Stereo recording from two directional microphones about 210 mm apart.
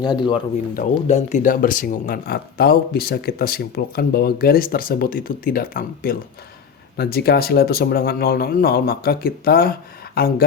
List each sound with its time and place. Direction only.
0.0 s speech: 20° left (ahead or behind)
0.8 s speech: 35° left (ahead or behind)